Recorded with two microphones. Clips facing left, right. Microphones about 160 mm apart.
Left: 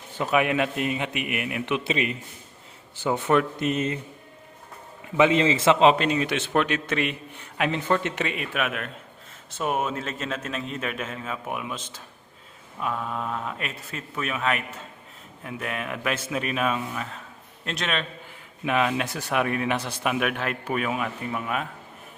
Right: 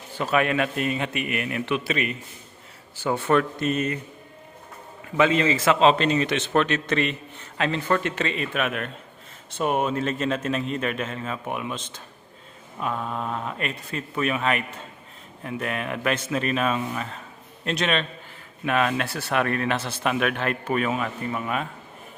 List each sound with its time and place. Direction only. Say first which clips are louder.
0.2 s a man's voice: even; 15° left (ahead or behind)
5.1 s a man's voice: left 1 dB; 20° left (ahead or behind); by 18.0 s centre (ahead or behind)
18.6 s a man's voice: right 1 dB; 15° left (ahead or behind)